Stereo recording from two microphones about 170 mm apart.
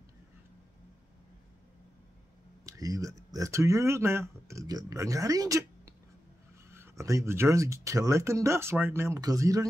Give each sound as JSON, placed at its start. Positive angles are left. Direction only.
{"t": 2.6, "sound": "speech", "side_deg": -20}
{"t": 6.7, "sound": "speech", "side_deg": -15}